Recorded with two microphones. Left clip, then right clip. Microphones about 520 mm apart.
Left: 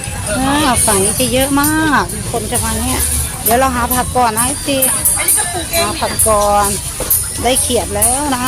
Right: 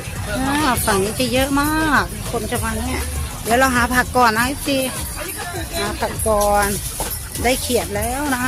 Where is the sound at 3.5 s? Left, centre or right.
Right.